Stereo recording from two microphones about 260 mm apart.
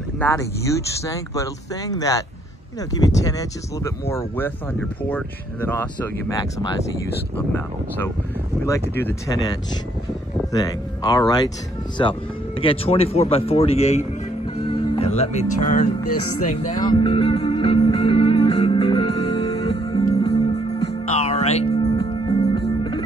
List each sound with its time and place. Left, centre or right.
0.2 s speech: centre
7.3 s speech: centre
10.5 s speech: centre
15.5 s music: left
16.5 s music: centre